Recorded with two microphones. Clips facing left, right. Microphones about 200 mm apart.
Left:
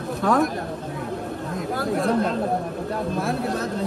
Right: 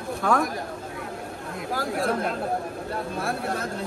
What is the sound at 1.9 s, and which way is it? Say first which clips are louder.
Chatter: left 5 dB; 5° right (ahead or behind).